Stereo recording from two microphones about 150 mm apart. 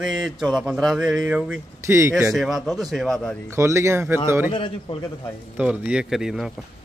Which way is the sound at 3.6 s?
20° right (ahead or behind).